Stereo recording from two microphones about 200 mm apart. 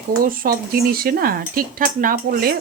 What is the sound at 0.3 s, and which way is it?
Speech, 45° right (ahead or behind).